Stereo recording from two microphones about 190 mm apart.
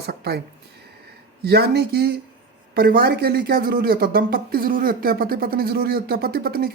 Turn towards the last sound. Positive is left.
turn(degrees=-55)  # may be behind; listen again after turning